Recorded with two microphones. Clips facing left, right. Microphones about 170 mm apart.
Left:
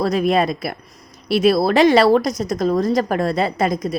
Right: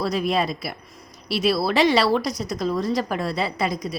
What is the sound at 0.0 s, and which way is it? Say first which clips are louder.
A woman's voice: left 5 dB; 50° left (ahead or behind).